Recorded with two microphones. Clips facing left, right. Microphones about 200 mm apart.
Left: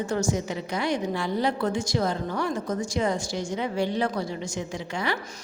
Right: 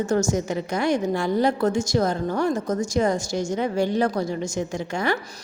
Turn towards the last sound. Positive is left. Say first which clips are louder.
# right 5 dB
turn(degrees=-45)  # may be behind; listen again after turning